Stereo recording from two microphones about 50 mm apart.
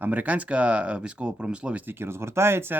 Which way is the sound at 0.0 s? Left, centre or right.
Right.